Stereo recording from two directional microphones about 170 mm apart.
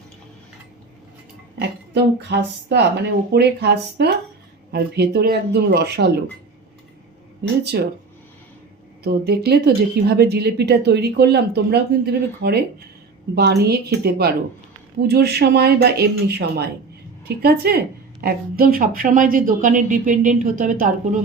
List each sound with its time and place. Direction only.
1.9 s speech: 80° right
7.6 s speech: 70° right (ahead or behind)
9.0 s a woman's voice: 70° right (ahead or behind); by 20.9 s 50° right (ahead or behind)